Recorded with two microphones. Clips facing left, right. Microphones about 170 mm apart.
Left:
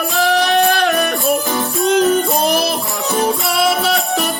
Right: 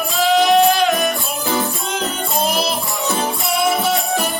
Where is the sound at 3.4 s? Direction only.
75° left (ahead or behind).